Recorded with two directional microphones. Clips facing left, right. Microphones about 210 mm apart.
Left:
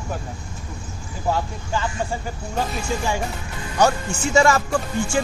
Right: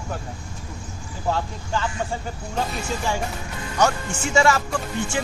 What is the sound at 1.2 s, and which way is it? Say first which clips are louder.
Speech: left 2 dB; 10° left (ahead or behind).